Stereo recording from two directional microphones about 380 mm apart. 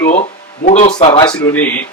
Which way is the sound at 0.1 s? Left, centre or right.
Centre.